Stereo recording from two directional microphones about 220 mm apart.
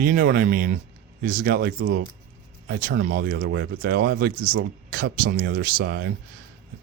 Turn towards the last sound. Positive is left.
turn(degrees=-45)  # may be behind; listen again after turning